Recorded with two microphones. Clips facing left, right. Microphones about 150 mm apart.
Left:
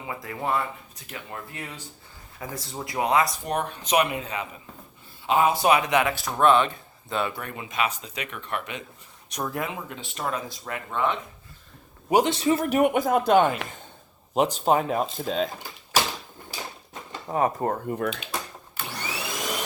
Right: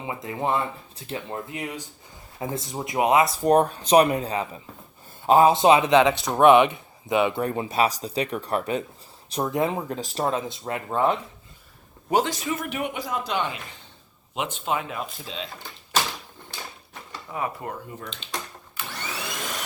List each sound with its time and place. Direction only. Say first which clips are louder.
0.0 s speech: right 3 dB; 20° right (ahead or behind)
3.4 s a man's voice: right 10 dB; 40° right (ahead or behind)
5.5 s speech: right 4 dB; 25° right (ahead or behind)
7.4 s speech: right 6 dB; 35° right (ahead or behind)
9.3 s speech: right 6 dB; 25° right (ahead or behind)
9.6 s speech: right 7 dB; 35° right (ahead or behind)
12.3 s speech: left 7 dB; 30° left (ahead or behind); by 13.6 s 50° left (ahead or behind)
14.3 s a man's voice: left 6 dB; 40° left (ahead or behind)
15.6 s a sound: left 1 dB; 10° left (ahead or behind)
17.2 s speech: left 7 dB; 40° left (ahead or behind)
18.9 s vacuum cleaner: left 1 dB; 10° left (ahead or behind)